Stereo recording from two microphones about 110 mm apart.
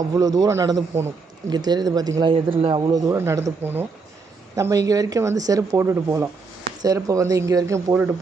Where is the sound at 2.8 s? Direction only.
35° right (ahead or behind).